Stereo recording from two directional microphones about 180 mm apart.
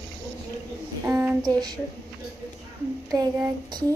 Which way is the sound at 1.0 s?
10° right (ahead or behind).